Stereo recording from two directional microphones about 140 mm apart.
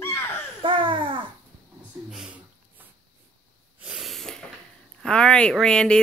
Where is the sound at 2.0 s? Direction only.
5° right (ahead or behind).